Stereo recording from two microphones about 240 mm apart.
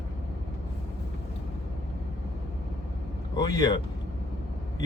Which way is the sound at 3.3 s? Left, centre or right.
Centre.